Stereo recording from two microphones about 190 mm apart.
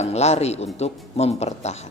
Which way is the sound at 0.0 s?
35° left (ahead or behind).